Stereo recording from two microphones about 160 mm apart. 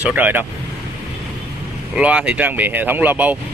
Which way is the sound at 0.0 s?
10° right (ahead or behind).